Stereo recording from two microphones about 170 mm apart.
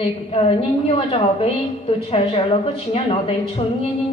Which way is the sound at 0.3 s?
35° left (ahead or behind).